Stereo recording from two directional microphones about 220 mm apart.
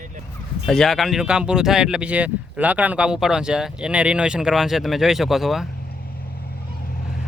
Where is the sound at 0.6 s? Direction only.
Centre (ahead or behind).